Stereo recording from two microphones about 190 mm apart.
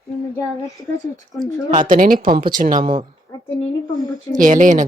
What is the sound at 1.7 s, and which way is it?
Speech, 45° right (ahead or behind).